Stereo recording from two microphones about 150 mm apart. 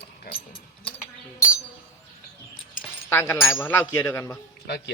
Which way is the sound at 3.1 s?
15° left (ahead or behind).